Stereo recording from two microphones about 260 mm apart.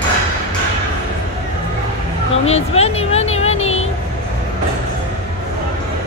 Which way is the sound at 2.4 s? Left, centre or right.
Left.